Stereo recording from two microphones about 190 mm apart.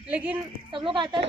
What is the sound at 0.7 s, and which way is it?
Speech, 25° right (ahead or behind).